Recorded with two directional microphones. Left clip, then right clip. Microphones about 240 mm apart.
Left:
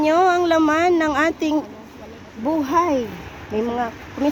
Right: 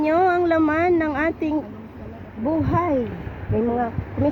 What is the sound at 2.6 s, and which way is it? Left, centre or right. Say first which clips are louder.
Speech: left 5 dB; centre.